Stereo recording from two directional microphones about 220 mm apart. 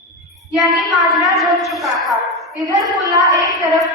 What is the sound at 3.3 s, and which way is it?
Speech, 15° right (ahead or behind).